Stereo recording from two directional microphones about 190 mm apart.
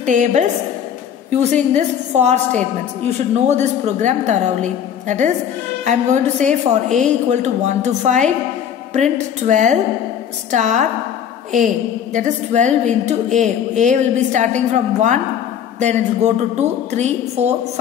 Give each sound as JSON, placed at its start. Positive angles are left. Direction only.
{"t": 0.0, "sound": "a woman's voice", "side_deg": -40}